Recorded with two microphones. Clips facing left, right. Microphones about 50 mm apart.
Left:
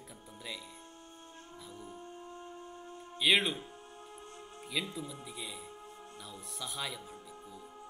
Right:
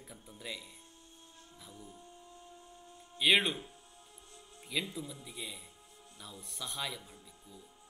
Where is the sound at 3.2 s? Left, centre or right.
Centre.